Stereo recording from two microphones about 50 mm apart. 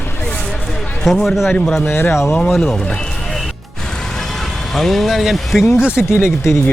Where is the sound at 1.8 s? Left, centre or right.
Left.